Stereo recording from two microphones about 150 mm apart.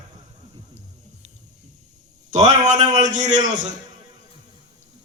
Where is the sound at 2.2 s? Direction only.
50° right (ahead or behind).